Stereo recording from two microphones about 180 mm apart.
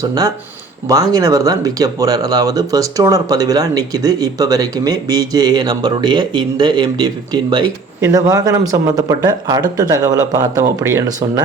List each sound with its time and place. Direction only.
0.0 s speech: 20° right (ahead or behind)